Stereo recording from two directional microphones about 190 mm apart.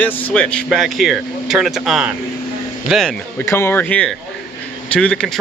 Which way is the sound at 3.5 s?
15° left (ahead or behind).